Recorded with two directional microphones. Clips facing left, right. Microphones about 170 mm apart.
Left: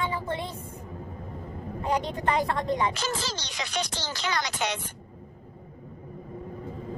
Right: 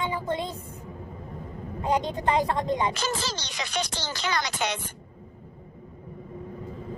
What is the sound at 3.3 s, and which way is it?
Speech, 55° right (ahead or behind).